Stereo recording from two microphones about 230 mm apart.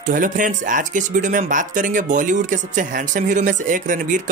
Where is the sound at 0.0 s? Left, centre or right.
Right.